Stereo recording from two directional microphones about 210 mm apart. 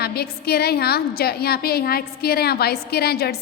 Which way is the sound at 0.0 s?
50° left (ahead or behind).